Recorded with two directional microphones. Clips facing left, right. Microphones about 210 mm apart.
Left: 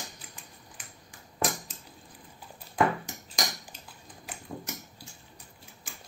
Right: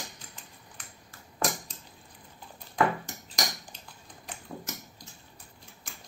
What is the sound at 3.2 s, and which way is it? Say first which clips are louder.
Cutlery: even; 10° left (ahead or behind).